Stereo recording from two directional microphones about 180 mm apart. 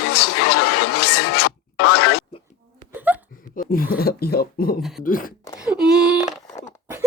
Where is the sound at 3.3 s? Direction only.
50° left (ahead or behind).